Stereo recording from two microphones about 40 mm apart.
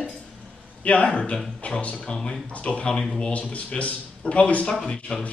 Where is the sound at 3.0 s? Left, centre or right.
Centre.